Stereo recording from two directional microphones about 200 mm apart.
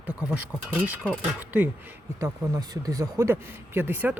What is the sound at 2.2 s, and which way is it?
Speech, 20° right (ahead or behind).